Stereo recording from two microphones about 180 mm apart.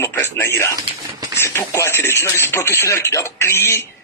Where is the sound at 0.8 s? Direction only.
20° right (ahead or behind).